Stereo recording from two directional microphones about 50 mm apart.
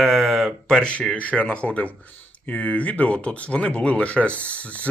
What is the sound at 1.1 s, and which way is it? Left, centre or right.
Speech, left.